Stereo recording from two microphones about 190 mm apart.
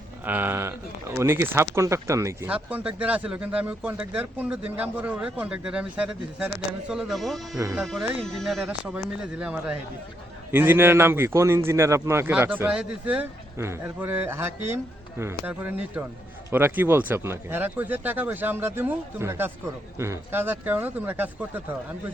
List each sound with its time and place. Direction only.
0.3 s speech: 10° right (ahead or behind)
7.5 s speech: 15° right (ahead or behind)
7.8 s speech: 5° right (ahead or behind)